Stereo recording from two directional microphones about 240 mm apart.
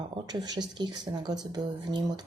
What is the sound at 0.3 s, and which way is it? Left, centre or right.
A woman's voice, centre.